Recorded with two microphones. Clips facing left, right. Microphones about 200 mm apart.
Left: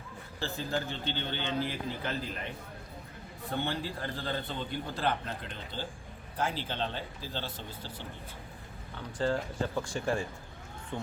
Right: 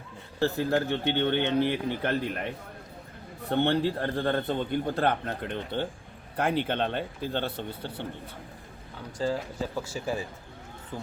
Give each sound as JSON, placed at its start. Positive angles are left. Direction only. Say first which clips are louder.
{"t": 0.3, "sound": "a man's voice", "louder": "right 9 dB", "side_deg": -65}
{"t": 3.5, "sound": "a man's voice", "louder": "right 10 dB", "side_deg": -65}
{"t": 9.1, "sound": "speech", "louder": "right 1 dB", "side_deg": -5}